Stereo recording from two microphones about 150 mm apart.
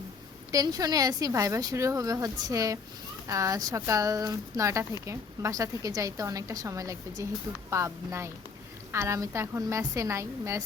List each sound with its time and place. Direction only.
0.5 s a woman's voice: 25° right (ahead or behind)